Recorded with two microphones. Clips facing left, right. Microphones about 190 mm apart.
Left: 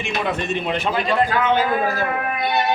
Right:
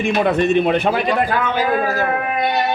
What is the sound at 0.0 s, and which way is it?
A man's voice, 55° right (ahead or behind).